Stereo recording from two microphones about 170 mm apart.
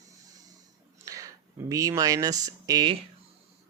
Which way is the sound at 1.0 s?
20° right (ahead or behind).